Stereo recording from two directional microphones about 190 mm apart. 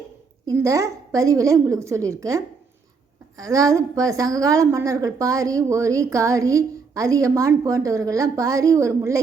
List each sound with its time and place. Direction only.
0.4 s a woman's voice: 15° right (ahead or behind)